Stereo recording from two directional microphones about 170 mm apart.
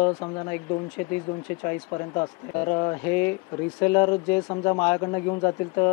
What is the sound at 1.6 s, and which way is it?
Speech, 15° left (ahead or behind).